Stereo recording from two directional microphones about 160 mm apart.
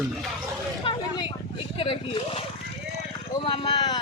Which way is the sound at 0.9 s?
35° left (ahead or behind).